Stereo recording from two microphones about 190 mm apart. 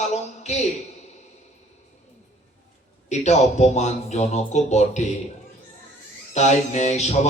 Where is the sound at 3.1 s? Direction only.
35° left (ahead or behind).